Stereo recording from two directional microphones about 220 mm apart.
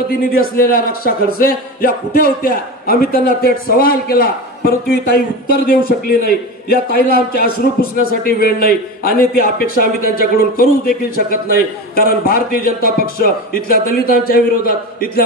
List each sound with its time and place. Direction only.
0.6 s speech: 40° left (ahead or behind)